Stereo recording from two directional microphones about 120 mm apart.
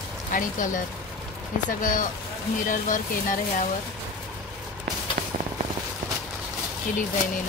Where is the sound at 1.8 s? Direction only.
90° left.